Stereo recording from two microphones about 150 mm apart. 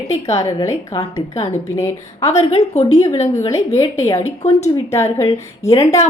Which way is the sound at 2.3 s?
45° left (ahead or behind).